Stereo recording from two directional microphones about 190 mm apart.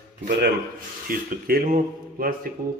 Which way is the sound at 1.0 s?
45° right (ahead or behind).